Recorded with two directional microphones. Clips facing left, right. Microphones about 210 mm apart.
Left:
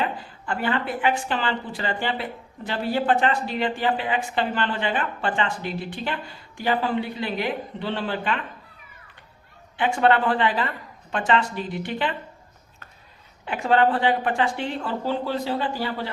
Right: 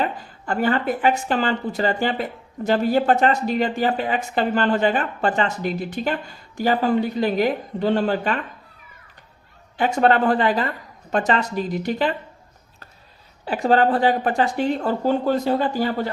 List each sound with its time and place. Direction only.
0.0 s a woman's voice: 40° right (ahead or behind)
9.7 s a woman's voice: 40° right (ahead or behind)
13.4 s a woman's voice: 35° right (ahead or behind)